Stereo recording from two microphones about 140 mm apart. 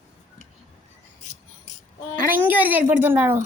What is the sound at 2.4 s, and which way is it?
Speech, 10° right (ahead or behind).